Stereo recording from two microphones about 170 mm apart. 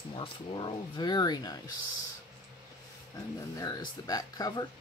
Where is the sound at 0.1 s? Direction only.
30° left (ahead or behind).